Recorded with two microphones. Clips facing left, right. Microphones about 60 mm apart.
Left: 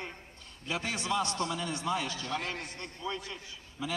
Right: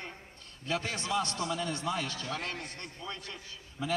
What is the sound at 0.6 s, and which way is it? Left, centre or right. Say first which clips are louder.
Speech: right 1 dB; centre.